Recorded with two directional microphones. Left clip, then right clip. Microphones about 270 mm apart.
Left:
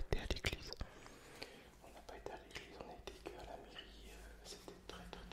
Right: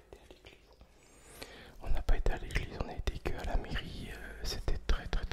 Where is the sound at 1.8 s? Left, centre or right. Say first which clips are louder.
Right 12 dB; right.